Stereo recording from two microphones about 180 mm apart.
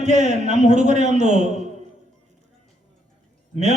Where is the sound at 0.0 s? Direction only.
40° right (ahead or behind).